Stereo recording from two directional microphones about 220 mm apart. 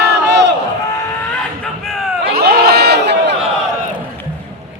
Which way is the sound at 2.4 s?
45° right (ahead or behind).